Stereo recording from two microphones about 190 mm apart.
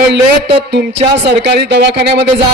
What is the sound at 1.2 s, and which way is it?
Speech, 60° right (ahead or behind).